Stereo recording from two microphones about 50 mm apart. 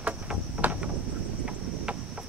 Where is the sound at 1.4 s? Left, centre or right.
Centre.